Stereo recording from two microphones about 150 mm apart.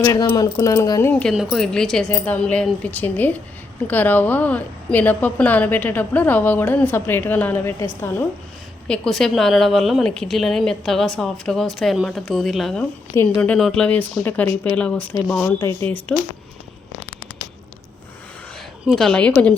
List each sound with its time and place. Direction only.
0.0 s speech: 25° left (ahead or behind)
1.2 s a woman's voice: centre (ahead or behind)
8.9 s a woman's voice: 5° left (ahead or behind)
18.9 s a woman's voice: 5° left (ahead or behind)